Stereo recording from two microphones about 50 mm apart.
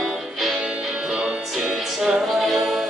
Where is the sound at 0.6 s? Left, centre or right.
Centre.